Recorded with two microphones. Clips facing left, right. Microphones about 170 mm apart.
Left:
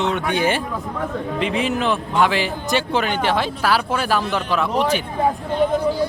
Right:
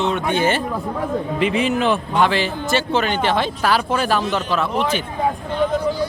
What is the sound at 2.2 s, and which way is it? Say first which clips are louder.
Speech: even; 10° left (ahead or behind).